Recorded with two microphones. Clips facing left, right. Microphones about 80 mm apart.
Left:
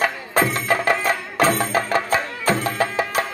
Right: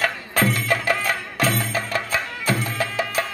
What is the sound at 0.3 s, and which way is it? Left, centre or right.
Music, left.